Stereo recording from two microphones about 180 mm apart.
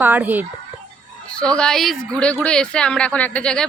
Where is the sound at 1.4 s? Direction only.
5° left (ahead or behind).